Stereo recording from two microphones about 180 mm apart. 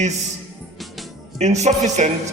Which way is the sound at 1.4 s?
40° right (ahead or behind).